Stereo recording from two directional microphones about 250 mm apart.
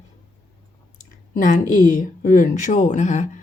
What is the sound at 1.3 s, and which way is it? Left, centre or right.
Speech, left.